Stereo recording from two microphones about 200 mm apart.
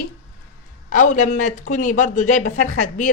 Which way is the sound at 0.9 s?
40° left (ahead or behind).